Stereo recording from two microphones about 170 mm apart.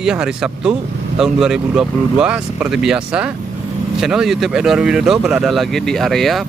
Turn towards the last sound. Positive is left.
turn(degrees=0)  # may be behind; listen again after turning